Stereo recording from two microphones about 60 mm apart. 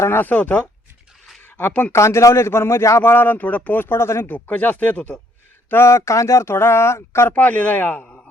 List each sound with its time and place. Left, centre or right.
0.2 s speech: left
2.0 s speech: left
3.0 s speech: left
4.4 s speech: left
5.7 s speech: left
7.3 s speech: left